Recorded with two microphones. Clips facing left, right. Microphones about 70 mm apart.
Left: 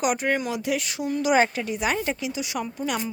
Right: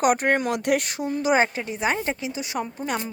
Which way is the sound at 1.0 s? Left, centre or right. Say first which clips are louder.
Left 3 dB; right.